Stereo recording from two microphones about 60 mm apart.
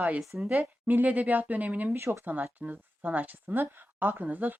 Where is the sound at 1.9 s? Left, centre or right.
Right.